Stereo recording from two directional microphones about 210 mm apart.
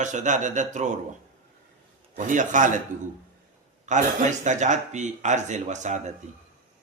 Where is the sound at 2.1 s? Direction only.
35° right (ahead or behind).